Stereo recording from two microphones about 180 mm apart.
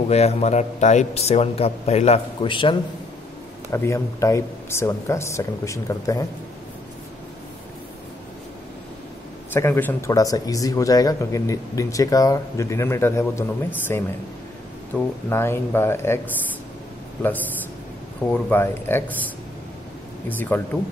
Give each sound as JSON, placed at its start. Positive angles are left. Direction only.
{"t": 0.1, "sound": "a man's voice", "side_deg": 35}
{"t": 3.7, "sound": "speech", "side_deg": 15}
{"t": 9.5, "sound": "speech", "side_deg": 10}
{"t": 18.3, "sound": "speech", "side_deg": 10}
{"t": 20.2, "sound": "speech", "side_deg": 10}